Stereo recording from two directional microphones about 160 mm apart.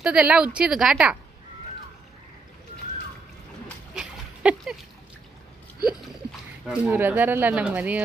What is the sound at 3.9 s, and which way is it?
Dog, 5° right (ahead or behind).